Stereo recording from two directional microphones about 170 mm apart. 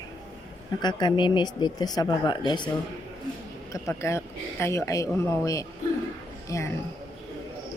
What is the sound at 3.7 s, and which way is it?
A child's voice, 15° left (ahead or behind).